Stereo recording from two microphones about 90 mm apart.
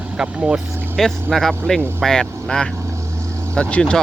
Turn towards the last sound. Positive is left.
turn(degrees=15)  # may be behind; listen again after turning